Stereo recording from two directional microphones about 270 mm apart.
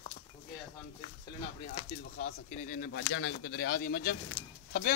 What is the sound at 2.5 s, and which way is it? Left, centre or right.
Speech, left.